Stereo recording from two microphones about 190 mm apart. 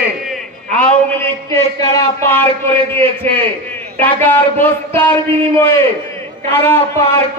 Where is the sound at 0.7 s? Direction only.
15° left (ahead or behind).